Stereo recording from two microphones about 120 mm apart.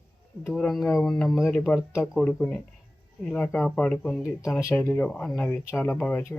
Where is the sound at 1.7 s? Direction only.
15° left (ahead or behind).